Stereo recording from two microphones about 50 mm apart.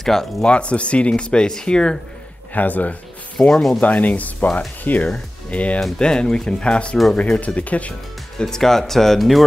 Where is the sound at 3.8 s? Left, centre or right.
Left.